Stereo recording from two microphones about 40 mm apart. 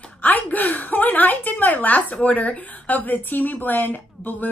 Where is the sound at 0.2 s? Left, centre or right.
Left.